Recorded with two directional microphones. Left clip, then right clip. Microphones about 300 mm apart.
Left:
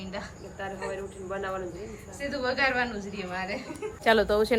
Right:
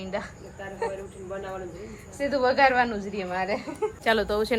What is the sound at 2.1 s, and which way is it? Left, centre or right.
A woman's voice, centre.